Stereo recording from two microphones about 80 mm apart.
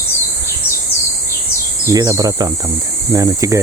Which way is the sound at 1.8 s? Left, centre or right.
Right.